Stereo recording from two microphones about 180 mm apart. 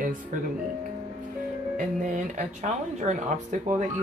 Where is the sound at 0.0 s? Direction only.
50° right (ahead or behind).